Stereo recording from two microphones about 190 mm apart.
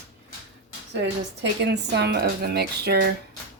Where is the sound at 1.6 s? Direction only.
60° right (ahead or behind).